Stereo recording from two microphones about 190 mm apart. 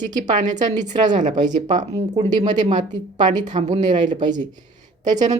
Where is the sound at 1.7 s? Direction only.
20° right (ahead or behind).